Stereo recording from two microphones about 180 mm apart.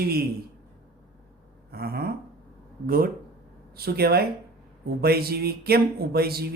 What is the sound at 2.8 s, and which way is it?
Speech, 55° right (ahead or behind).